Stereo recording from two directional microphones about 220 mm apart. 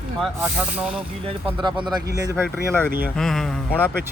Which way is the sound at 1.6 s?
20° right (ahead or behind).